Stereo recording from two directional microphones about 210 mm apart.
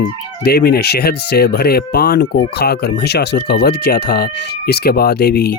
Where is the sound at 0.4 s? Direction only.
50° left (ahead or behind).